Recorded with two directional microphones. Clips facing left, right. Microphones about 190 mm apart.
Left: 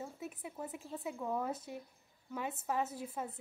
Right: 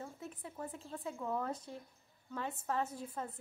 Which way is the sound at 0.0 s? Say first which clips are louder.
Left 2 dB; 10° left (ahead or behind).